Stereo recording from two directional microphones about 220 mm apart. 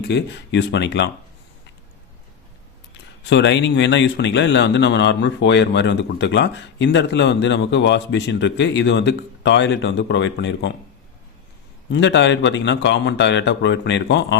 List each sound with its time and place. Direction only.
0.0 s speech: 50° left (ahead or behind)
3.2 s speech: 55° left (ahead or behind)
11.9 s speech: 55° left (ahead or behind)